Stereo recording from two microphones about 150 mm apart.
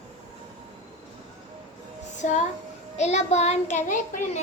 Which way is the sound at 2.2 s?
55° left (ahead or behind).